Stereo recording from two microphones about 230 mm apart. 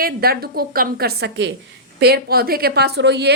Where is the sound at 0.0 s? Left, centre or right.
Right.